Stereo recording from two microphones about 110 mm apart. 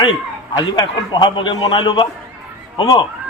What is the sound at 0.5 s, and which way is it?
A man's voice, 40° left (ahead or behind).